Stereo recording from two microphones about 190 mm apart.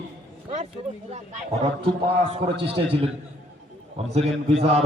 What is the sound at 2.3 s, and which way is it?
A man's voice, 30° right (ahead or behind).